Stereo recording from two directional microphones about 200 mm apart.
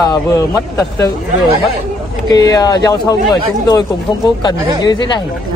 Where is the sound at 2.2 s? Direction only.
20° left (ahead or behind).